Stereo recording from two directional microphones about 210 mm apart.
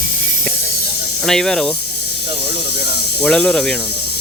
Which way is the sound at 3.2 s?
5° left (ahead or behind).